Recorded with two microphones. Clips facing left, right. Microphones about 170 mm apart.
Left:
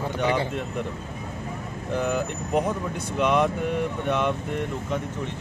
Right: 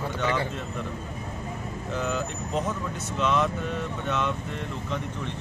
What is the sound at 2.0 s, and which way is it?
Speech, 55° left (ahead or behind).